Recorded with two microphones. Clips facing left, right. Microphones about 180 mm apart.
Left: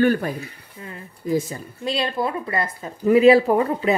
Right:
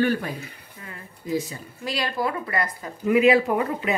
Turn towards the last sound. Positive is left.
turn(degrees=35)  # may be behind; listen again after turning